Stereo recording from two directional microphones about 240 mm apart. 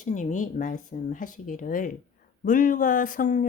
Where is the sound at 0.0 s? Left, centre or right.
Left.